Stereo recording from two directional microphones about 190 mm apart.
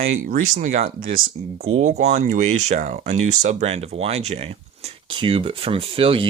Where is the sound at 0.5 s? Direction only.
40° right (ahead or behind).